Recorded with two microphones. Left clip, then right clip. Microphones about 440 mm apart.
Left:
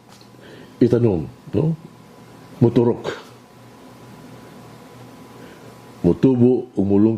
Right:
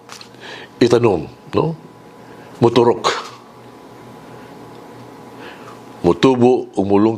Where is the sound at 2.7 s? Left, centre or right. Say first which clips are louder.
Right 7 dB; right.